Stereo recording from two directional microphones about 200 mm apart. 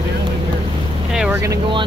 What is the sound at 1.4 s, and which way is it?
Speech, 20° right (ahead or behind).